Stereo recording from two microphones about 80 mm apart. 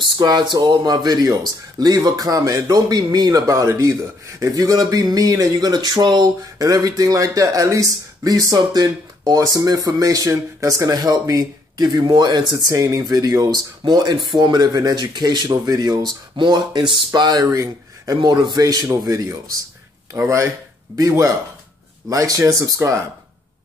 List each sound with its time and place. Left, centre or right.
0.2 s speech: right
6.6 s speech: right
12.7 s speech: right
13.5 s speech: right
17.5 s speech: right
18.2 s speech: right
20.9 s speech: right